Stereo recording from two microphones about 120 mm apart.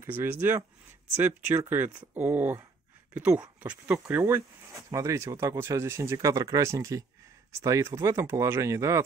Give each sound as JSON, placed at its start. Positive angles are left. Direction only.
{"t": 0.0, "sound": "speech", "side_deg": -15}